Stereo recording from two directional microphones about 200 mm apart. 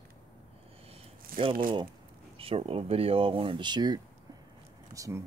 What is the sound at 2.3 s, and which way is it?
Speech, 30° right (ahead or behind).